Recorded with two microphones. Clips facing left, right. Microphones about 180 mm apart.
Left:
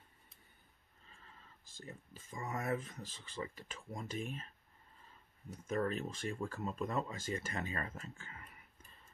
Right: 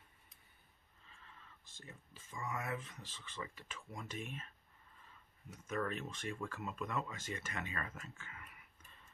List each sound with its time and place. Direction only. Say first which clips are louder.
1.0 s speech: even; 35° left (ahead or behind)
5.5 s speech: left 4 dB; 35° left (ahead or behind)